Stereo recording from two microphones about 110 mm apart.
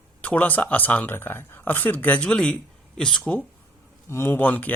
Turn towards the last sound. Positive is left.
turn(degrees=15)  # may be behind; listen again after turning